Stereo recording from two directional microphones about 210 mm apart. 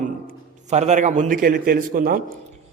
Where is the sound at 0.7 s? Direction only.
35° right (ahead or behind).